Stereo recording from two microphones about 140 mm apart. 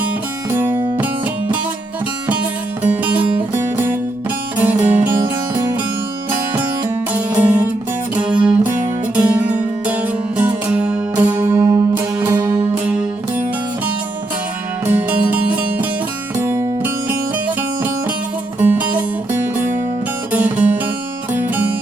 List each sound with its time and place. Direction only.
0.9 s music: 10° right (ahead or behind)
6.6 s music: 15° right (ahead or behind)
14.8 s music: 10° right (ahead or behind)
16.4 s music: 15° right (ahead or behind)
18.6 s music: 10° right (ahead or behind)